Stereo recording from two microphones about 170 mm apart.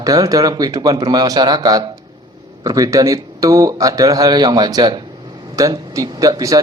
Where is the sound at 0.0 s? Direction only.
20° right (ahead or behind).